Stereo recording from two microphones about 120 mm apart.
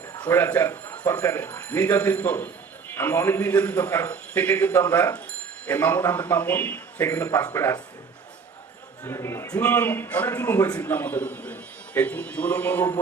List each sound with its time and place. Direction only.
0.2 s a man's voice: 15° left (ahead or behind)
9.0 s a man's voice: 25° left (ahead or behind)